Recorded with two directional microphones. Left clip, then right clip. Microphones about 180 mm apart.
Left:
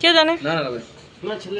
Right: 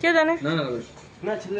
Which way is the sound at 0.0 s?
5° right (ahead or behind).